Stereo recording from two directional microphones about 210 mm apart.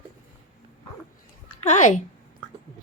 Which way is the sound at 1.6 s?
35° left (ahead or behind).